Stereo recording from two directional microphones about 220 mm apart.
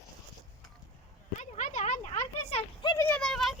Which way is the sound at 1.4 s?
35° left (ahead or behind).